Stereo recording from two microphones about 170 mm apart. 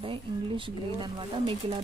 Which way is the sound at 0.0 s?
30° right (ahead or behind).